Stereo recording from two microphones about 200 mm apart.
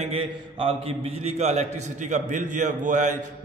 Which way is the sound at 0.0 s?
30° right (ahead or behind).